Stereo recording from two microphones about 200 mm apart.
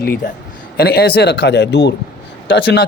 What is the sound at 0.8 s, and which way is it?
Speech, 50° left (ahead or behind).